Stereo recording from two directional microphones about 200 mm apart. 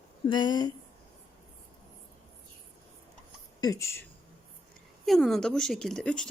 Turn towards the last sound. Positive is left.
turn(degrees=5)  # may be behind; listen again after turning